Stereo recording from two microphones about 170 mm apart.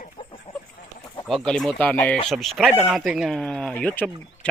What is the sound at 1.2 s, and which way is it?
Speech, centre (ahead or behind).